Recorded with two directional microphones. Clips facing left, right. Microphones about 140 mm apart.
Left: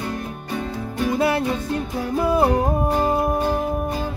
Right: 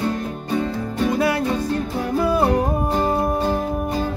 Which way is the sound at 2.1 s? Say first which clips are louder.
Even; 20° left (ahead or behind).